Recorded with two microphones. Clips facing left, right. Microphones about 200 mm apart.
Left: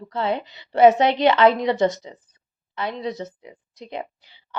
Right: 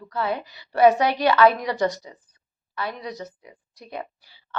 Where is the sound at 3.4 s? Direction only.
20° left (ahead or behind).